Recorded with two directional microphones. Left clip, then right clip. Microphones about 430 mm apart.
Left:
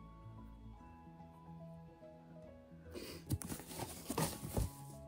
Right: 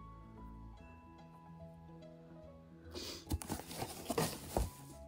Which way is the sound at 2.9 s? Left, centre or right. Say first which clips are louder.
Right 3 dB; centre.